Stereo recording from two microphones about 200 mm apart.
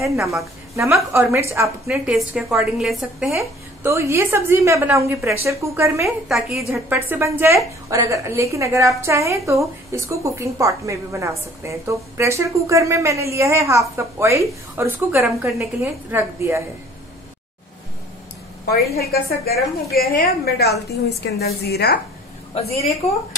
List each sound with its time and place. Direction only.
0.0 s a woman's voice: 15° right (ahead or behind)
3.8 s a woman's voice: 15° right (ahead or behind)
6.0 s a woman's voice: centre (ahead or behind)
6.7 s a woman's voice: 10° right (ahead or behind)
18.9 s a woman's voice: 50° left (ahead or behind)
22.5 s a woman's voice: 30° left (ahead or behind)